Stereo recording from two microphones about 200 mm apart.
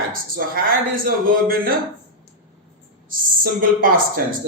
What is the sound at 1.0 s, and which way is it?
Speech, 45° right (ahead or behind).